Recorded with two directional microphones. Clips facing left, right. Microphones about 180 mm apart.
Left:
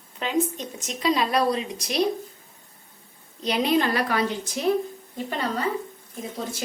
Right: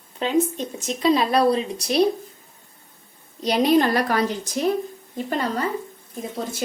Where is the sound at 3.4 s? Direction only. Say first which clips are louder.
Right 4 dB; 40° right (ahead or behind).